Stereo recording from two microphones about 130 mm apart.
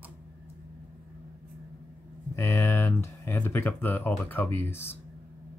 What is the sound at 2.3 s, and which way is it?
Speech, 20° left (ahead or behind).